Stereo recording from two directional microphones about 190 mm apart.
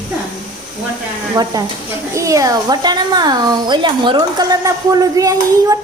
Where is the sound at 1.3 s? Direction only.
20° right (ahead or behind).